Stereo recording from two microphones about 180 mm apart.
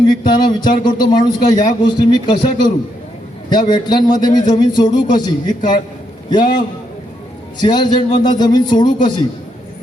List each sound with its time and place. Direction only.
0.1 s a man's voice: 25° left (ahead or behind)